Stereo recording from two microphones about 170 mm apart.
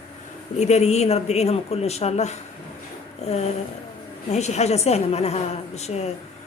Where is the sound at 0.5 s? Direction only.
40° left (ahead or behind).